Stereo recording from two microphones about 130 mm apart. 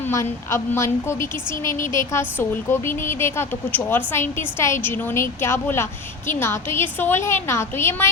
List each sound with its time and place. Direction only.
0.1 s a woman's voice: 20° left (ahead or behind)